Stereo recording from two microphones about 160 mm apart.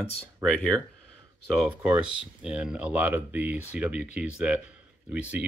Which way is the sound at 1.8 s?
10° right (ahead or behind).